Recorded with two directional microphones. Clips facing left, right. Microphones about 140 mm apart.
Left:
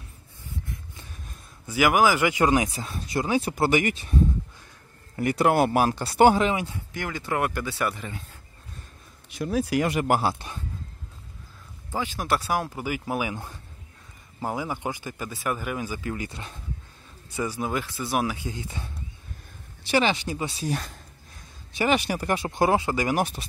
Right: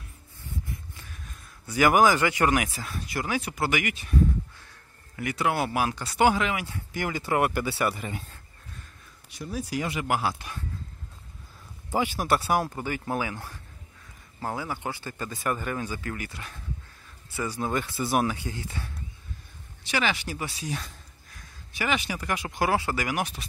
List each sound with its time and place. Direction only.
1.7 s speech: 5° left (ahead or behind); by 6.8 s 25° left (ahead or behind)
6.9 s speech: 5° right (ahead or behind)
9.4 s speech: 70° left (ahead or behind)
10.0 s speech: 35° left (ahead or behind)
11.9 s speech: 10° right (ahead or behind)
12.7 s speech: 10° left (ahead or behind)
17.3 s speech: 15° left (ahead or behind)
17.8 s speech: centre (ahead or behind)
18.3 s speech: 15° left (ahead or behind)
19.9 s speech: 25° left (ahead or behind)
21.7 s speech: 35° left (ahead or behind); by 23.1 s 20° left (ahead or behind)
23.1 s speech: 35° left (ahead or behind)